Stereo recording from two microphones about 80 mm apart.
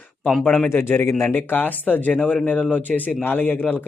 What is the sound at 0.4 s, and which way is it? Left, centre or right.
Speech, left.